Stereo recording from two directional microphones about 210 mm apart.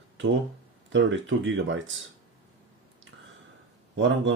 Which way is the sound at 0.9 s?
65° right (ahead or behind).